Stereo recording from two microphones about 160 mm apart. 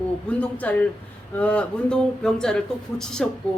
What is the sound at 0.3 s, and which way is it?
A woman's voice, 10° left (ahead or behind).